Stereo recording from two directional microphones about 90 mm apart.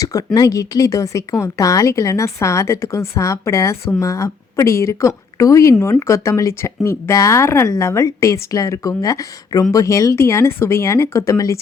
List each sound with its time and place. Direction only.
0.0 s speech: 40° left (ahead or behind)